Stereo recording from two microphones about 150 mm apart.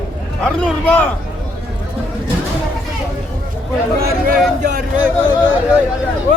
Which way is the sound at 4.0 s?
85° right.